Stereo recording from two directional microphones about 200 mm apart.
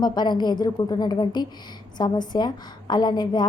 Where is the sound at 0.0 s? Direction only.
20° left (ahead or behind).